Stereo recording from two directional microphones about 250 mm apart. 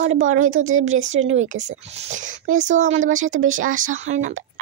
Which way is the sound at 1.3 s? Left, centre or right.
Right.